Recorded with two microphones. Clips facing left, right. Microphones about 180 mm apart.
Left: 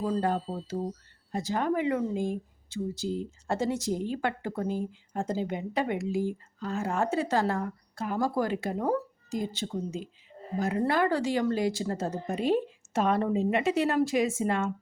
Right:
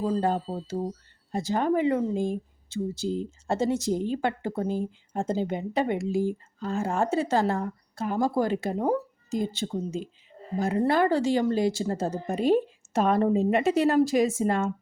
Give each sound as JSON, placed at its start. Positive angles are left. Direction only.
{"t": 0.0, "sound": "a woman's voice", "side_deg": -25}
{"t": 12.4, "sound": "a woman's voice", "side_deg": -40}